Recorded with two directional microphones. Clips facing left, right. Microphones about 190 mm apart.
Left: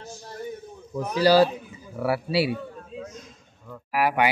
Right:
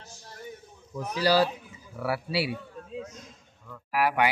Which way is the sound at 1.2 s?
25° left (ahead or behind).